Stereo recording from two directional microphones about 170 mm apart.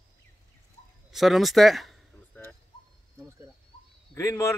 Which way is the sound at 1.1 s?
Centre (ahead or behind).